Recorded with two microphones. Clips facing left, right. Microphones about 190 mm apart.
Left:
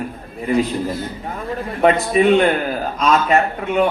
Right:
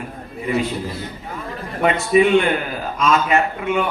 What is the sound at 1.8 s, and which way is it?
A man's voice, 40° left (ahead or behind).